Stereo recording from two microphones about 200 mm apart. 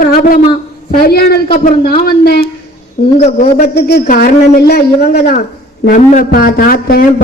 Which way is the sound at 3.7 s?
50° left (ahead or behind).